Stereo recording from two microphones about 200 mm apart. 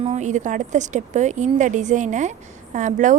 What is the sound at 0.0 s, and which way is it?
A woman's voice, 35° right (ahead or behind).